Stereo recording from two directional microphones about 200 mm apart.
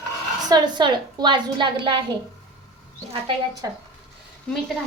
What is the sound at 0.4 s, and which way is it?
A woman's voice, 20° right (ahead or behind).